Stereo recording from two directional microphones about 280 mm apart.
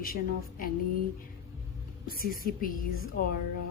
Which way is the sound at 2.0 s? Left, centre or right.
Left.